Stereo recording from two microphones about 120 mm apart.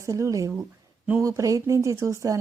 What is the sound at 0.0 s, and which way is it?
A woman's voice, 25° right (ahead or behind).